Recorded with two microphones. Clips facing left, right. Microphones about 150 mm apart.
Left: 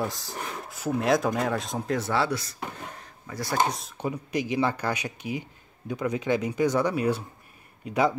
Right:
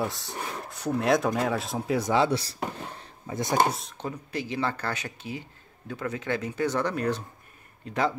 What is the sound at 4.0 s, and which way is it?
Speech, 15° left (ahead or behind).